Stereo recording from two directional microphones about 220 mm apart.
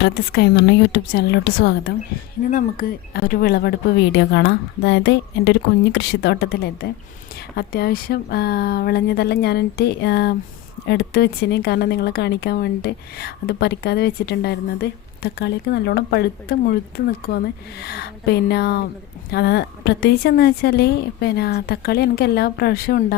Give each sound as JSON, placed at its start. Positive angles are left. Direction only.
{"t": 0.0, "sound": "speech", "side_deg": 50}